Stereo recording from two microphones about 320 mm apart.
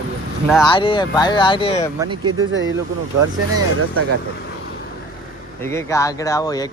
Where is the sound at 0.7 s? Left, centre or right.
Centre.